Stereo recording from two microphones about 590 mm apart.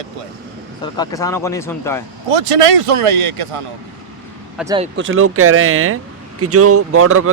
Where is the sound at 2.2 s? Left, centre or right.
Right.